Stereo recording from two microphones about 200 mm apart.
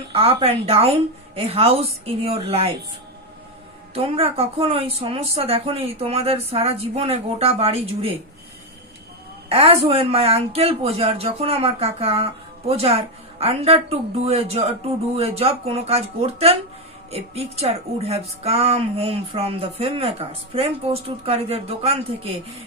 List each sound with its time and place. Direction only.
0.1 s a woman's voice: 30° right (ahead or behind)
3.9 s a woman's voice: 30° right (ahead or behind)
9.5 s speech: 30° right (ahead or behind)